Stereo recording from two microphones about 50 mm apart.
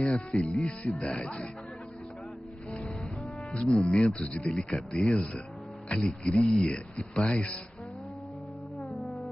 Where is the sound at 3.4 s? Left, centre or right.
Left.